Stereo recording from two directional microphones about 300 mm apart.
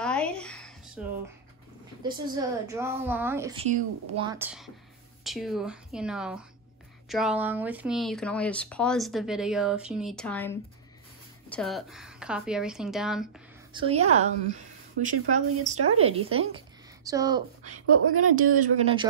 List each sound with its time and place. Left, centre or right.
0.0 s a sound: centre
2.0 s speech: centre
4.3 s speech: centre
13.7 s a woman's voice: right
17.6 s speech: right